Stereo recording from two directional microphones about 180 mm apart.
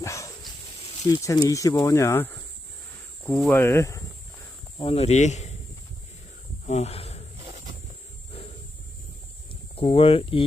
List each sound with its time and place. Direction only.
0.0 s dog: 15° left (ahead or behind)
1.1 s speech: 20° left (ahead or behind)
3.2 s cricket: centre (ahead or behind)
3.5 s speech: 15° left (ahead or behind)
4.8 s speech: 35° left (ahead or behind)
6.7 s speech: 35° left (ahead or behind)
8.3 s a sound: 30° left (ahead or behind)
9.5 s speech: 30° left (ahead or behind)